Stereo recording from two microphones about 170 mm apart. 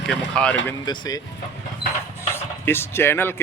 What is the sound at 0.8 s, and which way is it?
Speech, 25° left (ahead or behind).